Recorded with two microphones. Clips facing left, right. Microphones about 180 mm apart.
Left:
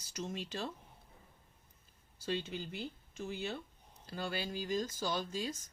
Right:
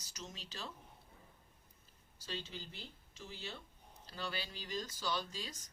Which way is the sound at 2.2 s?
55° left (ahead or behind).